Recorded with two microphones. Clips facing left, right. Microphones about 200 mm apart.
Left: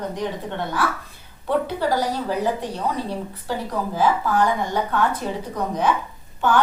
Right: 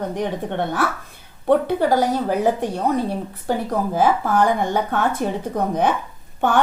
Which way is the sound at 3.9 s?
50° right (ahead or behind).